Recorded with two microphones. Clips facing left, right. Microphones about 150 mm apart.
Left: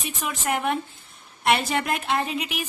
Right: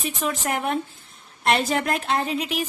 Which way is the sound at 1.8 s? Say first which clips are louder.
Right 2 dB; centre (ahead or behind).